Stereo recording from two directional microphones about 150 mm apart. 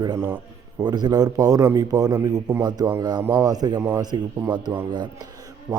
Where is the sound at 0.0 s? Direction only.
25° right (ahead or behind).